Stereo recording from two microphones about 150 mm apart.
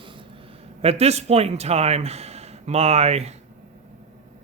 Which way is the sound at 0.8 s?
45° right (ahead or behind).